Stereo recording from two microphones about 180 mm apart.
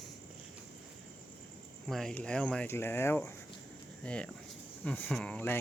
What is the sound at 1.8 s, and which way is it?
Speech, centre (ahead or behind).